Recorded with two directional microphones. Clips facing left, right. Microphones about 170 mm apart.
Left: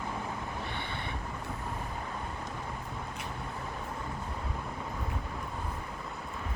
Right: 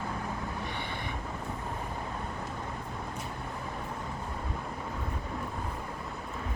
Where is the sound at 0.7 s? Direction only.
15° right (ahead or behind).